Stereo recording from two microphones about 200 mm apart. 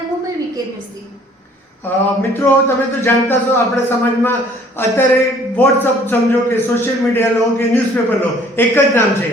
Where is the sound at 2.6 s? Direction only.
10° left (ahead or behind).